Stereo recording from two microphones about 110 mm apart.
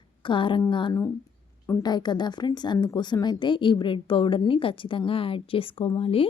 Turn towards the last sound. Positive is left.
turn(degrees=55)  # may be behind; listen again after turning